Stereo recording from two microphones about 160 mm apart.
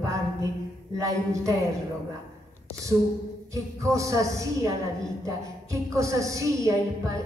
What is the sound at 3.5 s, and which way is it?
A woman's voice, 20° right (ahead or behind).